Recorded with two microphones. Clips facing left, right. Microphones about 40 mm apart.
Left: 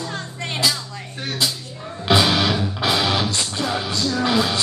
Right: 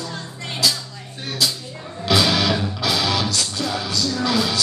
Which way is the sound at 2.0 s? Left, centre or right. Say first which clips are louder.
Left 1 dB; left.